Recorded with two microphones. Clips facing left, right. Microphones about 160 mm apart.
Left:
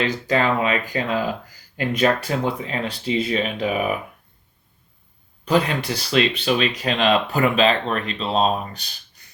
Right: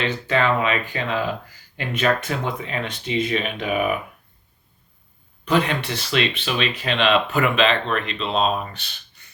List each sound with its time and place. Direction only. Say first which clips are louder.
0.0 s speech: left 1 dB; 35° left (ahead or behind)
5.5 s speech: left 1 dB; 35° left (ahead or behind)